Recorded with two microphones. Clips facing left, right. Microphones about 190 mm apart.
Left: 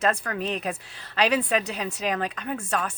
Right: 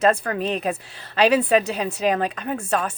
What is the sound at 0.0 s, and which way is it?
A woman's voice, 30° right (ahead or behind).